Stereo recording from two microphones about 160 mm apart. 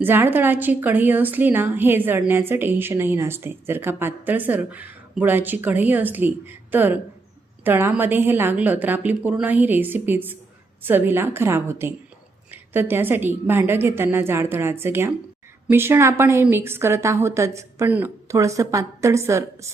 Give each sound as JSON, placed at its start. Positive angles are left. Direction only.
{"t": 0.0, "sound": "a woman's voice", "side_deg": -15}